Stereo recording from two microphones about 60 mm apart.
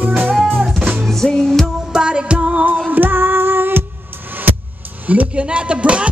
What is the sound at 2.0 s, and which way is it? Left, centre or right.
Music, centre.